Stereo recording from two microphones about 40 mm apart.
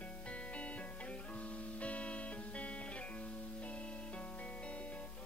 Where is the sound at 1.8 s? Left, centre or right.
Left.